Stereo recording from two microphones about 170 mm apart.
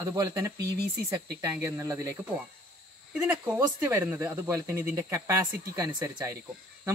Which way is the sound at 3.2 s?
15° right (ahead or behind).